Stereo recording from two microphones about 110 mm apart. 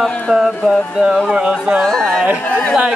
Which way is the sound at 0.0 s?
10° left (ahead or behind).